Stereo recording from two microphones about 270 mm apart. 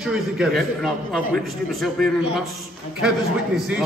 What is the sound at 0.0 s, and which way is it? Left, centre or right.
A man's voice, centre.